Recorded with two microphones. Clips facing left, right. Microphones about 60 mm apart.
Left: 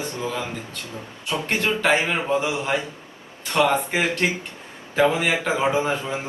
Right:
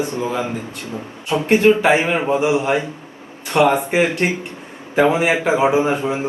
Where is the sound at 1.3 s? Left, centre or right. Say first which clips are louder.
Right 7 dB; right.